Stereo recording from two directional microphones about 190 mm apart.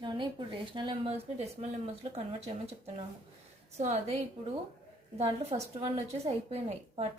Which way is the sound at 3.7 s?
35° right (ahead or behind).